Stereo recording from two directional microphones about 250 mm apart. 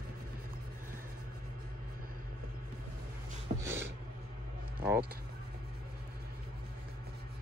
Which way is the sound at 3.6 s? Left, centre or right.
Centre.